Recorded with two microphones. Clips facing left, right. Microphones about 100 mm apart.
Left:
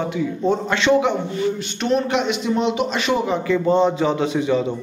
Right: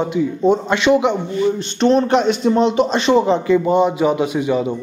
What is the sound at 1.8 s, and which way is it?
A man's voice, 30° right (ahead or behind).